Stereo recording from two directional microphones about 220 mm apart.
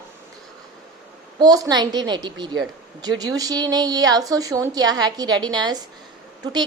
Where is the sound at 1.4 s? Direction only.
15° right (ahead or behind).